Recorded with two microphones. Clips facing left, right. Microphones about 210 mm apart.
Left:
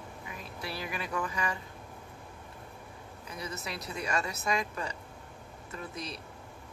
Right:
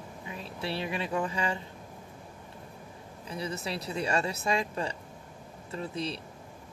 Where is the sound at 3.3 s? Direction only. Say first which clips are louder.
Right 5 dB; 30° right (ahead or behind).